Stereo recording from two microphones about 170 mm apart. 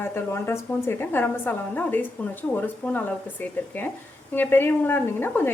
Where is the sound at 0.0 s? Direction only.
15° left (ahead or behind).